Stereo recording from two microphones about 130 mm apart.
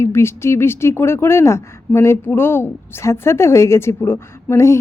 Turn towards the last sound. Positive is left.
turn(degrees=20)  # may be behind; listen again after turning